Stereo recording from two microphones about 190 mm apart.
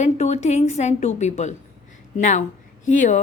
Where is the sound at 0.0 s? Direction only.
35° left (ahead or behind).